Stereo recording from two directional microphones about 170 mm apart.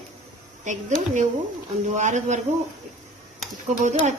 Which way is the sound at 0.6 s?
45° right (ahead or behind).